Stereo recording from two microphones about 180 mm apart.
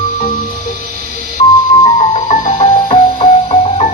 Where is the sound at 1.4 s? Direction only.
35° left (ahead or behind).